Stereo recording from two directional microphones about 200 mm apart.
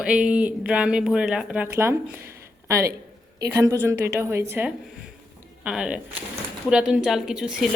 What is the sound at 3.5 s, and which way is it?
A woman's voice, 15° right (ahead or behind).